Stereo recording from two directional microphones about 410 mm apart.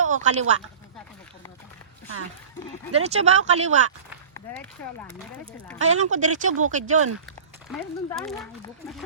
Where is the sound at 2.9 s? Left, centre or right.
Centre.